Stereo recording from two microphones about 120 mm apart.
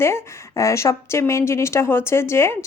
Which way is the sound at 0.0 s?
25° left (ahead or behind).